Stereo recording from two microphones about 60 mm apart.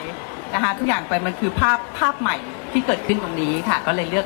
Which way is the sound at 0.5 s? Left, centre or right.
Left.